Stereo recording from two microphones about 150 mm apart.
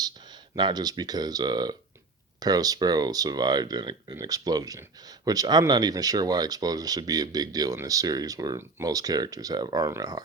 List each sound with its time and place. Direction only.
0.5 s speech: 30° right (ahead or behind)